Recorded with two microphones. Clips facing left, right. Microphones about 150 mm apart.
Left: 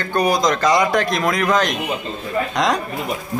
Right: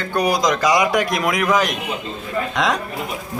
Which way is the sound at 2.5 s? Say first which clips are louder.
Left 1 dB; centre (ahead or behind).